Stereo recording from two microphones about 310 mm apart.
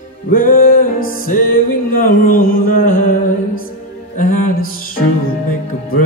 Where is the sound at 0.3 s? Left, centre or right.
Left.